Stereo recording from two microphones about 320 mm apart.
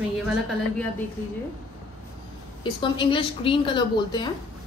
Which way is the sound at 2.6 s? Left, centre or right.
Centre.